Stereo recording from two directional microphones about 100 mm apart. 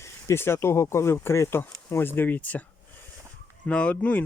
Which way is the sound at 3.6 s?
10° left (ahead or behind).